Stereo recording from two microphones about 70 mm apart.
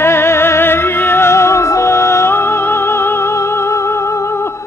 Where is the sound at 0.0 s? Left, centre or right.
Left.